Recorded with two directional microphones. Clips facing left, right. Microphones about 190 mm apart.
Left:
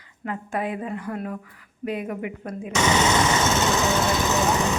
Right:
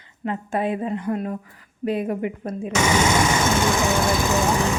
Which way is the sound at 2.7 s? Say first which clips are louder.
Right 1 dB; 10° right (ahead or behind).